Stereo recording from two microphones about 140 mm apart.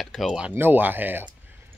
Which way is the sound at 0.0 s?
Centre (ahead or behind).